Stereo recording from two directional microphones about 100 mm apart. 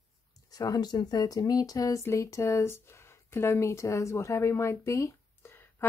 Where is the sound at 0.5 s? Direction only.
40° left (ahead or behind).